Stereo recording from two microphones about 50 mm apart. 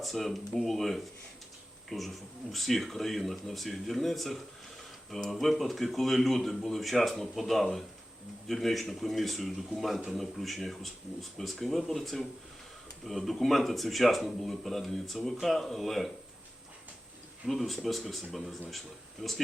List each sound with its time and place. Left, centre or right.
0.0 s speech: centre
17.4 s speech: centre
19.2 s speech: centre